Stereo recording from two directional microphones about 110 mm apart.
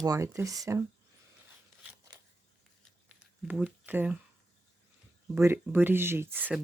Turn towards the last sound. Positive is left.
turn(degrees=-20)  # may be behind; listen again after turning